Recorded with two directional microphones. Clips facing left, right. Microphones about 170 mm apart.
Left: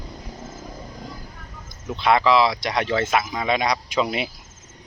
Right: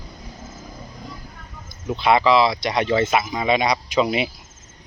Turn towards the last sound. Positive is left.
turn(degrees=-5)  # may be behind; listen again after turning